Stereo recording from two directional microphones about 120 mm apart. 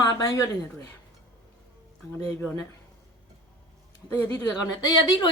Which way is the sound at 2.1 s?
20° left (ahead or behind).